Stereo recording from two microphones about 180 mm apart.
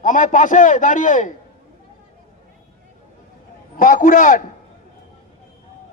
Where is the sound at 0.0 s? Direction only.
45° left (ahead or behind).